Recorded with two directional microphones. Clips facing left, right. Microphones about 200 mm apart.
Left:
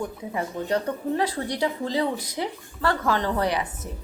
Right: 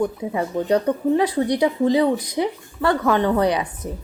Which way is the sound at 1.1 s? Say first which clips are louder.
Right 6 dB; 15° right (ahead or behind).